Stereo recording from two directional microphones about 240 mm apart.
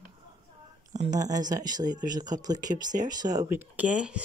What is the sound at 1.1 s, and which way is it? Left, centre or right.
Speech, centre.